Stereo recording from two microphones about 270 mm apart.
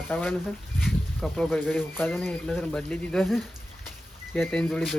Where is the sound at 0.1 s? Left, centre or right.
Centre.